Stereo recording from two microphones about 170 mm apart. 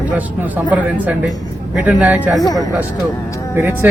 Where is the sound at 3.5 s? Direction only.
10° right (ahead or behind).